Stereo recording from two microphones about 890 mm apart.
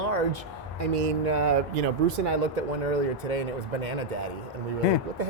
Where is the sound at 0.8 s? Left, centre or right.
Right.